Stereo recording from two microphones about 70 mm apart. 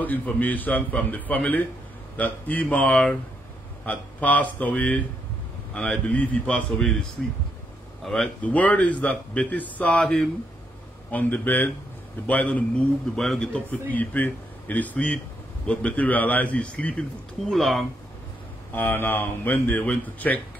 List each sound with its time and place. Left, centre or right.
0.0 s a man's voice: left
8.0 s a man's voice: centre
8.4 s a man's voice: left
13.1 s a man's voice: centre
13.7 s a man's voice: left
17.5 s a man's voice: centre
18.7 s a man's voice: left